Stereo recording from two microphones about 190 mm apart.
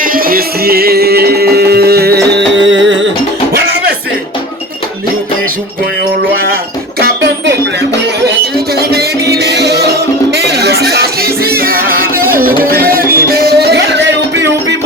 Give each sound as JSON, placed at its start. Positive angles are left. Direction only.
{"t": 0.0, "sound": "music", "side_deg": -50}
{"t": 2.5, "sound": "music", "side_deg": -75}
{"t": 6.3, "sound": "a sound", "side_deg": -50}
{"t": 7.0, "sound": "music", "side_deg": -60}